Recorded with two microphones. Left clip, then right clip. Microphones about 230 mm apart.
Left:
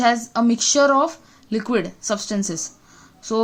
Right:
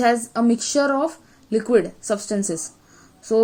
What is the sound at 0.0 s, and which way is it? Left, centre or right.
Speech, left.